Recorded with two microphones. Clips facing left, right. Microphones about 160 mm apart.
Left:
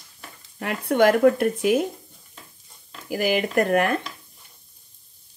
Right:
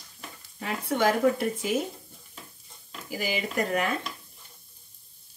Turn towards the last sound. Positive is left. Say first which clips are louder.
# left 7 dB
turn(degrees=60)  # may be behind; listen again after turning